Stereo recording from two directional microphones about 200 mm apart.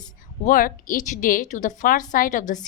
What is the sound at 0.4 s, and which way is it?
A woman's voice, 45° left (ahead or behind).